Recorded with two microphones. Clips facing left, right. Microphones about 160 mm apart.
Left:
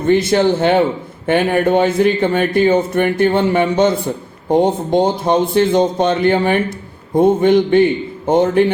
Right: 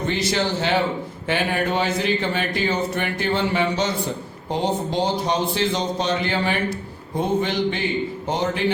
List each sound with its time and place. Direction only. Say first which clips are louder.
0.1 s speech: left 13 dB; 55° left (ahead or behind)